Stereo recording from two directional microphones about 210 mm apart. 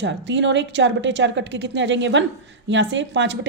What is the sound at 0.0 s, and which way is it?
A woman's voice, 60° right (ahead or behind).